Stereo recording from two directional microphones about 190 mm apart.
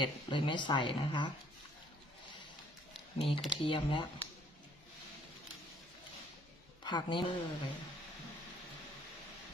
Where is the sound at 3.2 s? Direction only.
25° left (ahead or behind).